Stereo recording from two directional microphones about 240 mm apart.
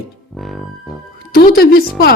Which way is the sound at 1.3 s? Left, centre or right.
Left.